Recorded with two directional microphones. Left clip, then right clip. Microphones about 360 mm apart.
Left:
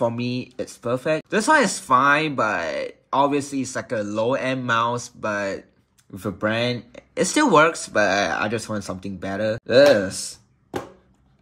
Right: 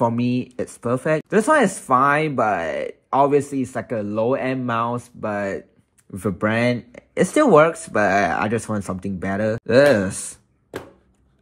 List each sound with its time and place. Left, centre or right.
0.0 s speech: centre